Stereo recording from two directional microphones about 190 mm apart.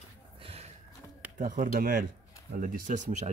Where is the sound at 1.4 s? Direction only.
40° right (ahead or behind).